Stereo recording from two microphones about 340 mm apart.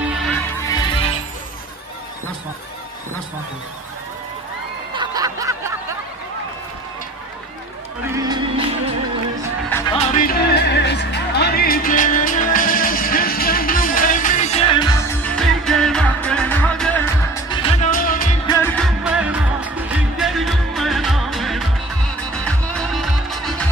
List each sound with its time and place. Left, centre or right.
0.6 s music: centre
4.9 s snicker: centre
8.2 s music: centre
9.7 s music: centre
9.9 s music: left
18.5 s music: centre